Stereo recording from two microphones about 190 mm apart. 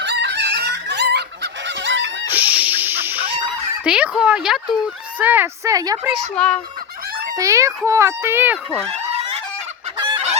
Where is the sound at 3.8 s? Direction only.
5° right (ahead or behind).